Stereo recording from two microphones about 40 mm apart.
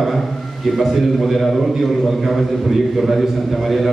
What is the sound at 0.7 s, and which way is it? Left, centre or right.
A man's voice, centre.